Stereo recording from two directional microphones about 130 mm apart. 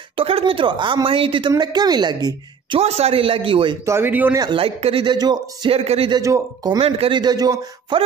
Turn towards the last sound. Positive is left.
turn(degrees=-30)  # may be behind; listen again after turning